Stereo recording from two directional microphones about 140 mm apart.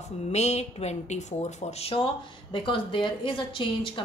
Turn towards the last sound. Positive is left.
turn(degrees=35)  # may be behind; listen again after turning